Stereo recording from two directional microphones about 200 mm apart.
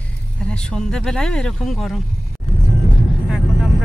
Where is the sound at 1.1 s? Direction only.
5° left (ahead or behind).